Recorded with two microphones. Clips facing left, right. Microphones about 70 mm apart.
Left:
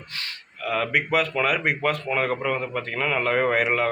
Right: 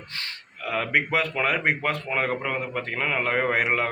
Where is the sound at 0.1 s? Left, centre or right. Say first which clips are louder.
Left 1 dB; right.